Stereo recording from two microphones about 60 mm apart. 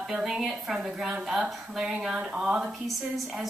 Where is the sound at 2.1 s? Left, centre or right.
Centre.